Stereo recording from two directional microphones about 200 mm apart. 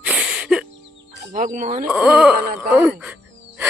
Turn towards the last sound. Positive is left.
turn(degrees=-5)  # may be behind; listen again after turning